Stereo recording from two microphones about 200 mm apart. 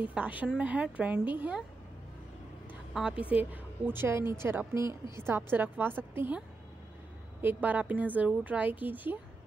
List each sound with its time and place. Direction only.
0.0 s speech: 5° right (ahead or behind)
2.9 s speech: 5° right (ahead or behind)
7.4 s speech: 10° right (ahead or behind)